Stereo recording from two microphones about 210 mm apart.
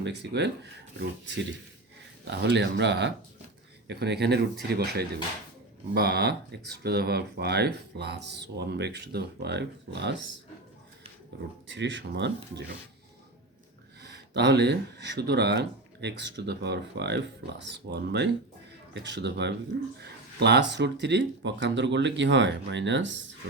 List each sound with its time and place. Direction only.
0.0 s speech: 55° right (ahead or behind)
2.4 s speech: 55° right (ahead or behind)
11.7 s speech: 55° right (ahead or behind)
14.0 s speech: 55° right (ahead or behind)